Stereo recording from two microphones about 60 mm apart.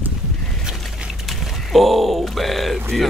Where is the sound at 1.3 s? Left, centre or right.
Centre.